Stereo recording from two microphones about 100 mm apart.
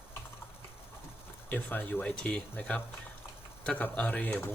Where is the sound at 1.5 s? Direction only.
15° left (ahead or behind).